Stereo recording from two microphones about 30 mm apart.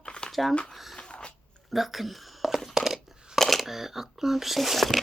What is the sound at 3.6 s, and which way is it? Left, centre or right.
Speech, centre.